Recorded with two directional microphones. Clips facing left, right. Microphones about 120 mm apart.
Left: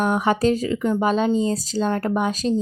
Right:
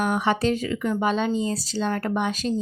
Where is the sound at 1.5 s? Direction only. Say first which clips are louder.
Left 3 dB; 40° left (ahead or behind).